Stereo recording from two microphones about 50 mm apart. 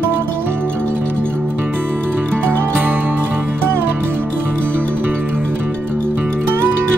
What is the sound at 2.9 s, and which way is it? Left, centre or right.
Music, right.